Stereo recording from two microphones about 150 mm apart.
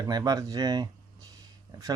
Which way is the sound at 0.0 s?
25° right (ahead or behind).